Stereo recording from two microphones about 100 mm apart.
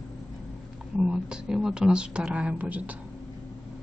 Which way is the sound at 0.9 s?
10° right (ahead or behind).